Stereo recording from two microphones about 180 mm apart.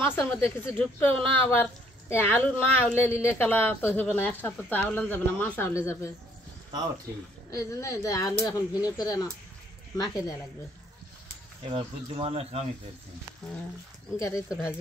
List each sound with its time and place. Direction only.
0.0 s speech: 10° left (ahead or behind)
7.5 s speech: 15° left (ahead or behind)
11.6 s speech: 30° right (ahead or behind)
14.1 s speech: 15° left (ahead or behind)